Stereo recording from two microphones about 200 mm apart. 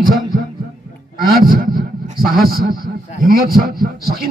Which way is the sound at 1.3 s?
45° right (ahead or behind).